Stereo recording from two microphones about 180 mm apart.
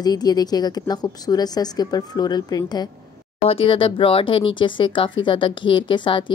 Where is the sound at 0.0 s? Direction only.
20° left (ahead or behind).